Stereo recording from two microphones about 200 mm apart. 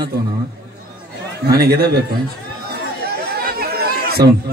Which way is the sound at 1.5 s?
50° right (ahead or behind).